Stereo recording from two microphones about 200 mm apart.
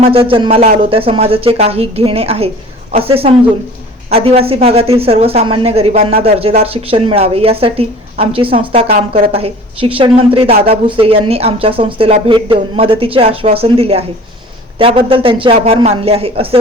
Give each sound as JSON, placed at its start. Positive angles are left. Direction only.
{"t": 0.0, "sound": "a woman's voice", "side_deg": -25}